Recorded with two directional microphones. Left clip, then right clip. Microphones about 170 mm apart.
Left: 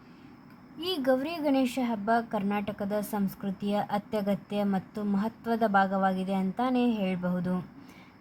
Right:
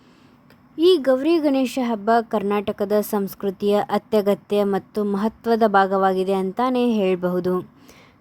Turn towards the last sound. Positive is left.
turn(degrees=-50)  # may be behind; listen again after turning